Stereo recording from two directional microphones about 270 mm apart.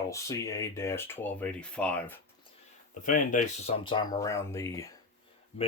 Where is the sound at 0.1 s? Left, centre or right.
Centre.